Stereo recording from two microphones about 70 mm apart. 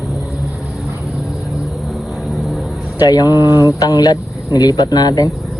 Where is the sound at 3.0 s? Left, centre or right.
Left.